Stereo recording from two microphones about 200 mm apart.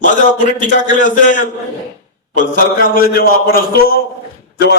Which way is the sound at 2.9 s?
45° left (ahead or behind).